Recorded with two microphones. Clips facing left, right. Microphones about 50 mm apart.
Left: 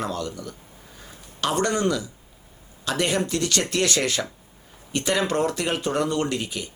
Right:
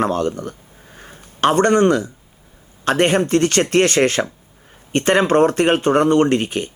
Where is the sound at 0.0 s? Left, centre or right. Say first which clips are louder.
Right 10 dB; right.